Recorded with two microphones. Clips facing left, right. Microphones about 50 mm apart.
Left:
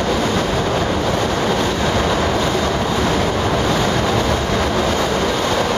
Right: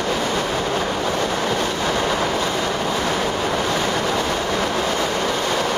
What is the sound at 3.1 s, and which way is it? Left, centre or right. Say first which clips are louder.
Waves: left 3 dB; left.